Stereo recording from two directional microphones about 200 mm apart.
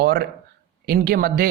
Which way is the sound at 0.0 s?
50° right (ahead or behind).